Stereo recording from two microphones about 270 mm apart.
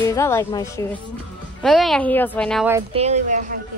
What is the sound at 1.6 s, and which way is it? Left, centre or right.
Speech, centre.